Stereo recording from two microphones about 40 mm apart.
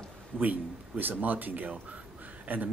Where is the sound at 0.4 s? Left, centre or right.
Right.